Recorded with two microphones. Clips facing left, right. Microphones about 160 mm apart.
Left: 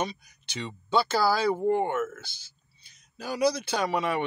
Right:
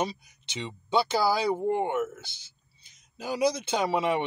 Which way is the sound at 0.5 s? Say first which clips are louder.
Left 1 dB; 20° right (ahead or behind).